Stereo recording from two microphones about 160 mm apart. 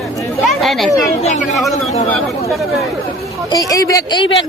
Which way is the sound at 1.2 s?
45° left (ahead or behind).